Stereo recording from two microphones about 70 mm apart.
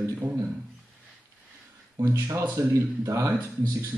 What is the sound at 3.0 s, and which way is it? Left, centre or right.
Speech, right.